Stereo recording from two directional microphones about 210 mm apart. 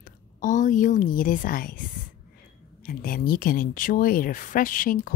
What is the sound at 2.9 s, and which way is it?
A woman's voice, 45° left (ahead or behind).